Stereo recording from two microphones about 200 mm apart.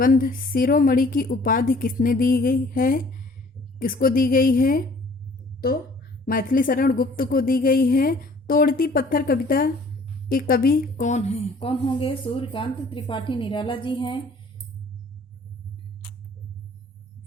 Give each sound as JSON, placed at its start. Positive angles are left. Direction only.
{"t": 0.0, "sound": "a woman's voice", "side_deg": 45}